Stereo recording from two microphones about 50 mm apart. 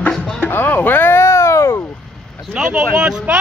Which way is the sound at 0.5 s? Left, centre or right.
Left.